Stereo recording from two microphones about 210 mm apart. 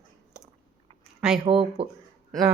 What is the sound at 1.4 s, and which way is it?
Speech, 25° right (ahead or behind).